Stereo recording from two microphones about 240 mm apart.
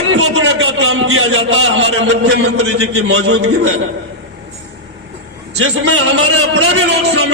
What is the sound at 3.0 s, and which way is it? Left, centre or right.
Speech, right.